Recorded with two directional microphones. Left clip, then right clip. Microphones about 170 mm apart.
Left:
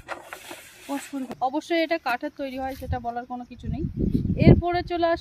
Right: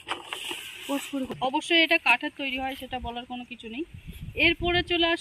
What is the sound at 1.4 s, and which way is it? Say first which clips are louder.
Speech: right 1 dB; 25° left (ahead or behind).